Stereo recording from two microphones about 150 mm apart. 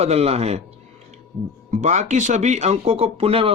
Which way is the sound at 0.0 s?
45° right (ahead or behind).